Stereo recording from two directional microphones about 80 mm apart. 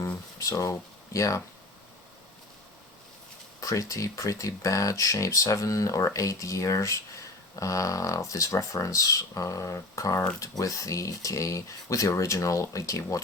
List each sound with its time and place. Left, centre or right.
0.3 s speech: left
3.6 s speech: left